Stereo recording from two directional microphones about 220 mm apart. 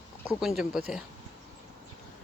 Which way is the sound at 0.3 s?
Centre (ahead or behind).